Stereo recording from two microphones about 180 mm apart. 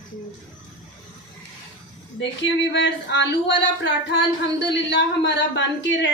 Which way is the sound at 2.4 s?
80° left.